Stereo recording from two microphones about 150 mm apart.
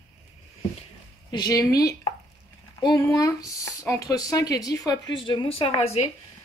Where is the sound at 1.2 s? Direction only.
25° left (ahead or behind); by 6.1 s 40° left (ahead or behind).